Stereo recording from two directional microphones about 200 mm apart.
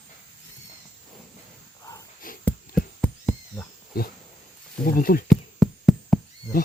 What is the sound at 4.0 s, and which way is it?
Speech, 50° left (ahead or behind).